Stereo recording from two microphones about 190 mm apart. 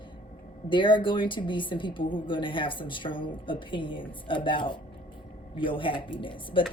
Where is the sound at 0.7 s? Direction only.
25° left (ahead or behind).